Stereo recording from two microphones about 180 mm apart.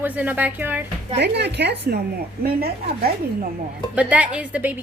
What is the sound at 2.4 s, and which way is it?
Speech, 60° right (ahead or behind).